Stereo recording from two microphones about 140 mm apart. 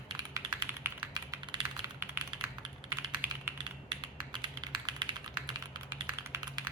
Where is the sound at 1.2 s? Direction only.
30° right (ahead or behind).